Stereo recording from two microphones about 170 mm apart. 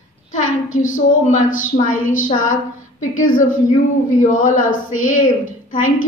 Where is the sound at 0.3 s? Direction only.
45° left (ahead or behind).